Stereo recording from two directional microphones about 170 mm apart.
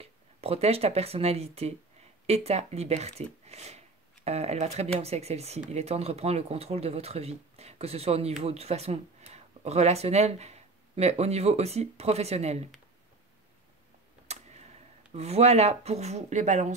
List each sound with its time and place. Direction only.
0.0 s speech: 35° right (ahead or behind)
14.2 s tick-tock: 40° right (ahead or behind)
15.1 s speech: 40° right (ahead or behind)